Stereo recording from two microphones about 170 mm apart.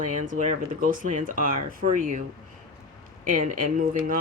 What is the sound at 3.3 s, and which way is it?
Speech, 55° right (ahead or behind).